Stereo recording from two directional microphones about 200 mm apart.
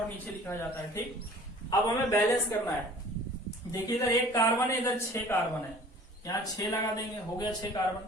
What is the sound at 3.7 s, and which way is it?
A man's voice, 15° left (ahead or behind).